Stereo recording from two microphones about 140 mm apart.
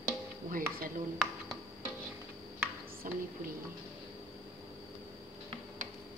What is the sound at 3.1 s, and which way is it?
Speech, 75° right (ahead or behind).